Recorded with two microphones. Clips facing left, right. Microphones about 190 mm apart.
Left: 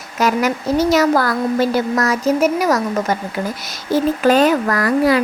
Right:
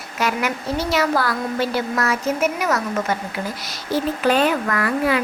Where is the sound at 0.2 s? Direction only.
40° left (ahead or behind).